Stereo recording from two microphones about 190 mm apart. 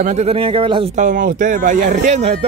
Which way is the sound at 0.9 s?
45° right (ahead or behind).